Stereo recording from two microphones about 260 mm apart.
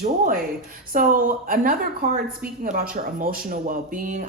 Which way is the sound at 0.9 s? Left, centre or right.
Right.